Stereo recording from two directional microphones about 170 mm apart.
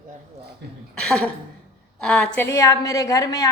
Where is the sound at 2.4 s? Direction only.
20° left (ahead or behind).